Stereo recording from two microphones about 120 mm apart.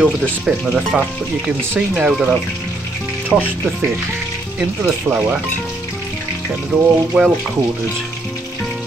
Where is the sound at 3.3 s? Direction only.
10° right (ahead or behind).